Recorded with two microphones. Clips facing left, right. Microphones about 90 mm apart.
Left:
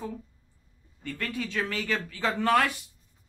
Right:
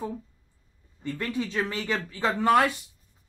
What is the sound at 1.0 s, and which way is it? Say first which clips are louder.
Speech: right 3 dB; 20° right (ahead or behind).